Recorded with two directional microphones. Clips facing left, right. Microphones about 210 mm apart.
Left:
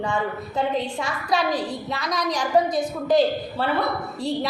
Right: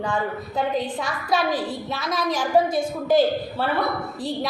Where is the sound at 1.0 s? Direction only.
20° left (ahead or behind).